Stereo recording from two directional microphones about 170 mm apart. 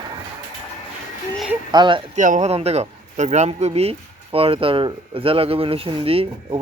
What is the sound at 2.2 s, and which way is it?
Speech, 45° right (ahead or behind).